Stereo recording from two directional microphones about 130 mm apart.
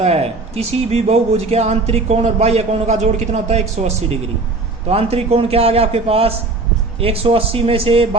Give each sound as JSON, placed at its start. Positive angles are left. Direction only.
{"t": 0.0, "sound": "a man's voice", "side_deg": -55}